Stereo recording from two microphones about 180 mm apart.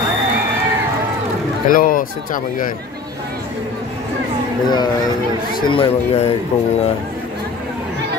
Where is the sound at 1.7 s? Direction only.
50° left (ahead or behind).